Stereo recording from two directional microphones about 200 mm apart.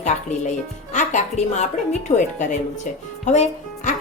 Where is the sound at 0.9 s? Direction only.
35° left (ahead or behind).